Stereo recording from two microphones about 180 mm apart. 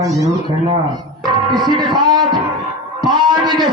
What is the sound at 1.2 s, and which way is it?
Music, 25° right (ahead or behind).